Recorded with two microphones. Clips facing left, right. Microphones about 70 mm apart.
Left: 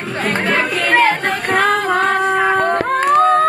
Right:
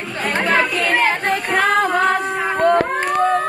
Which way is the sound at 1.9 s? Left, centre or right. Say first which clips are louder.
Left 2 dB; left.